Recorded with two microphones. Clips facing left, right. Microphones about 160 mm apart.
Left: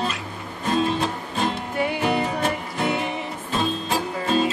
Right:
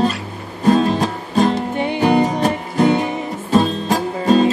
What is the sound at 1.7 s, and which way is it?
Music, 25° right (ahead or behind).